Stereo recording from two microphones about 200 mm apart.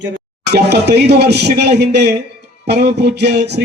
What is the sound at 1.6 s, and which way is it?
Music, 55° right (ahead or behind).